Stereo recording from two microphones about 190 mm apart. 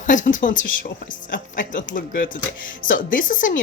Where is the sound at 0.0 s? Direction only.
40° left (ahead or behind).